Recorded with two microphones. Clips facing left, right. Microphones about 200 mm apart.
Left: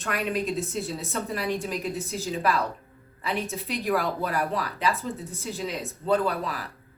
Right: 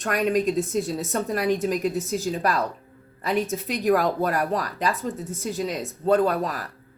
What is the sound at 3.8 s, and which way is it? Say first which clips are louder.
Speech: right 6 dB; 45° right (ahead or behind).